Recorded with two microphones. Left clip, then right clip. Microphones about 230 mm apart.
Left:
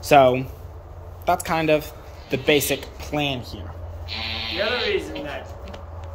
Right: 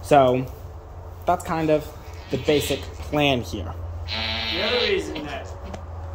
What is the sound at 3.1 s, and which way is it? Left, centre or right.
Speech, centre.